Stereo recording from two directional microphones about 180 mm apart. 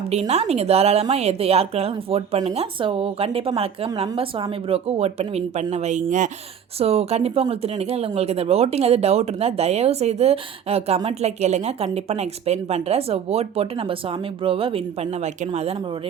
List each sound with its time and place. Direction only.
0.1 s speech: 35° right (ahead or behind)
6.7 s speech: 35° right (ahead or behind)